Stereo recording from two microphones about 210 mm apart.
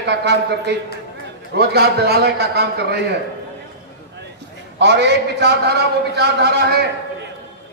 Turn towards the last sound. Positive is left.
turn(degrees=-50)  # may be behind; listen again after turning